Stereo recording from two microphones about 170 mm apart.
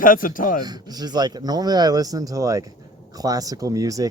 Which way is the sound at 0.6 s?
25° right (ahead or behind).